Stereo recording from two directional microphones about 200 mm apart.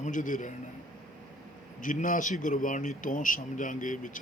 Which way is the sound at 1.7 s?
40° left (ahead or behind).